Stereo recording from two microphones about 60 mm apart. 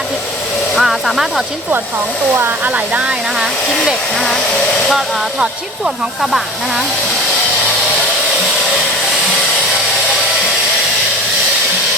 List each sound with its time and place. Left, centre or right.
0.8 s speech: centre
2.3 s speech: right
2.7 s speech: right
3.3 s speech: centre